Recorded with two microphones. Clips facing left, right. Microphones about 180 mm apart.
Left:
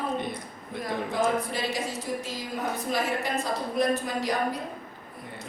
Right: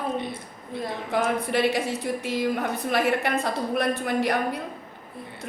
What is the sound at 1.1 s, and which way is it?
A woman's voice, 65° right (ahead or behind).